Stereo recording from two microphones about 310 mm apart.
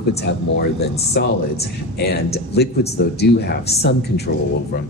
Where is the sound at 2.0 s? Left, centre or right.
Left.